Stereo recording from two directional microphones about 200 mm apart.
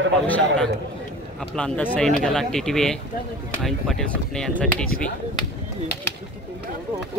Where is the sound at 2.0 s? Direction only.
Centre (ahead or behind).